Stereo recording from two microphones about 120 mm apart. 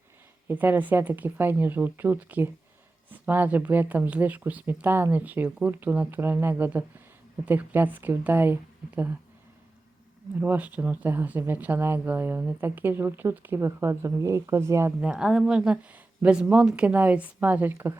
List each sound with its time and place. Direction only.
0.4 s speech: 15° right (ahead or behind)
10.3 s speech: 15° right (ahead or behind)
15.0 s speech: 10° right (ahead or behind)